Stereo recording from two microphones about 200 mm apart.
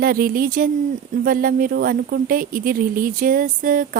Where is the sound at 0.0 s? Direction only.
45° right (ahead or behind).